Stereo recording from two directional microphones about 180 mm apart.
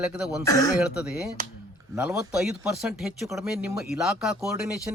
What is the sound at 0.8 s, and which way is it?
Speech, 5° right (ahead or behind).